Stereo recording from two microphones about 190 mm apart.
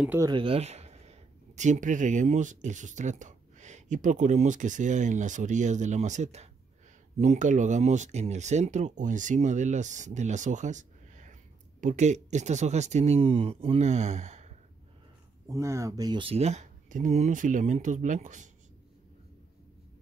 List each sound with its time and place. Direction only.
0.2 s speech: 25° right (ahead or behind)
15.4 s speech: 15° right (ahead or behind); by 18.5 s 40° right (ahead or behind)